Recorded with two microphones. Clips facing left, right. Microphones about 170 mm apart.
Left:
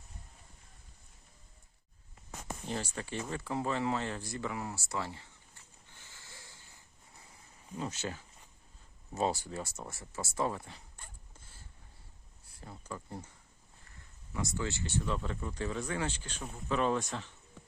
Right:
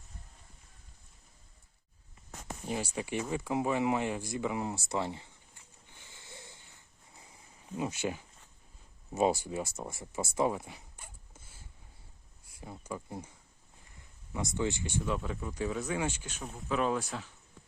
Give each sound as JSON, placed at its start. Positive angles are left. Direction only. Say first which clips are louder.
{"t": 2.6, "sound": "speech", "louder": "right 4 dB", "side_deg": -10}
{"t": 5.9, "sound": "wheeze", "louder": "right 4 dB", "side_deg": -15}
{"t": 7.8, "sound": "speech", "louder": "right 4 dB", "side_deg": -10}
{"t": 12.5, "sound": "speech", "louder": "right 3 dB", "side_deg": -15}
{"t": 14.3, "sound": "speech", "louder": "right 3 dB", "side_deg": -20}